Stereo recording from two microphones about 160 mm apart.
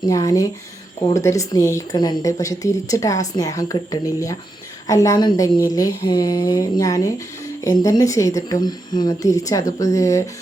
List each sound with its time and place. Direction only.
0.1 s speech: 20° left (ahead or behind)